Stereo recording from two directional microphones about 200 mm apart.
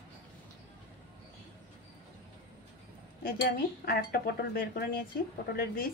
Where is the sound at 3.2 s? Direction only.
50° left (ahead or behind).